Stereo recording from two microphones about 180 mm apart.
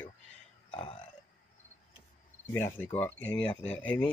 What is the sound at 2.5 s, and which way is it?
Speech, 10° left (ahead or behind).